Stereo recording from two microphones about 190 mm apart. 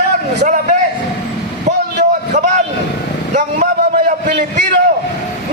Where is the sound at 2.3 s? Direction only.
40° right (ahead or behind).